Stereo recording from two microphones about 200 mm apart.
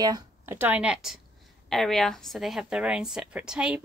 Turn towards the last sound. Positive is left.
turn(degrees=-5)  # may be behind; listen again after turning